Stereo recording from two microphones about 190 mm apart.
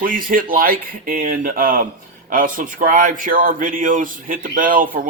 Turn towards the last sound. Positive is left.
turn(degrees=-45)  # may be behind; listen again after turning